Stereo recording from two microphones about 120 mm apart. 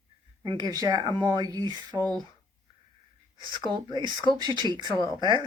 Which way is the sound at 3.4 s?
40° right (ahead or behind).